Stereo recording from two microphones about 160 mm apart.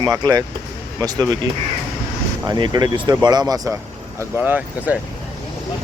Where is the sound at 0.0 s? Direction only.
25° right (ahead or behind).